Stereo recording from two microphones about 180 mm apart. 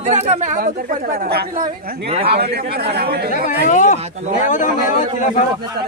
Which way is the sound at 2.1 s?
30° right (ahead or behind).